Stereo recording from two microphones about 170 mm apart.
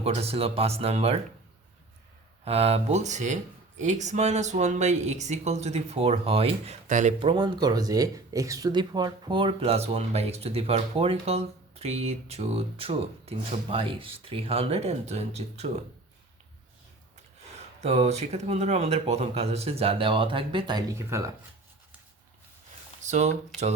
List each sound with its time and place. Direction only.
0.0 s speech: 35° right (ahead or behind)
2.4 s speech: 35° right (ahead or behind)
6.8 s speech: 45° right (ahead or behind)
7.2 s speech: 30° right (ahead or behind)
17.7 s speech: 40° right (ahead or behind); by 21.2 s 20° right (ahead or behind)
23.0 s speech: 45° right (ahead or behind)